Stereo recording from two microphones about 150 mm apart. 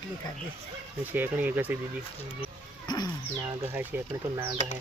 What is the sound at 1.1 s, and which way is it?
Speech, 10° right (ahead or behind).